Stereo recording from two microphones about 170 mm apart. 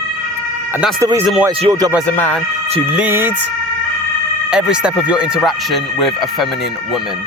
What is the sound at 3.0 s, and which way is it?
Speech, 10° right (ahead or behind).